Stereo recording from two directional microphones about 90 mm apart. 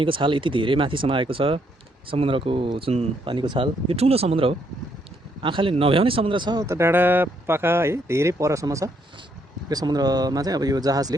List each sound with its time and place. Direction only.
0.0 s speech: 70° right (ahead or behind); by 4.5 s 90° right
5.4 s speech: 70° right (ahead or behind)
6.6 s speech: 30° right (ahead or behind)